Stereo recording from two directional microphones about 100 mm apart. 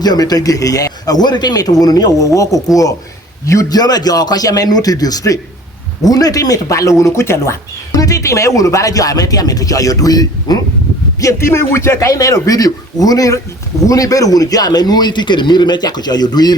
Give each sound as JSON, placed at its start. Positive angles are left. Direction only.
{"t": 0.0, "sound": "speech", "side_deg": 40}
{"t": 11.2, "sound": "a man's voice", "side_deg": 30}